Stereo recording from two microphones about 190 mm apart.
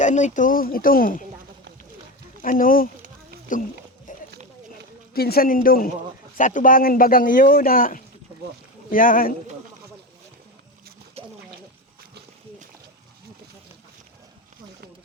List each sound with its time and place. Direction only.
0.0 s speech: 40° left (ahead or behind)
2.4 s speech: 45° left (ahead or behind)
4.1 s a sound: 45° left (ahead or behind)
5.1 s speech: 55° left (ahead or behind)
11.2 s splash: 30° right (ahead or behind)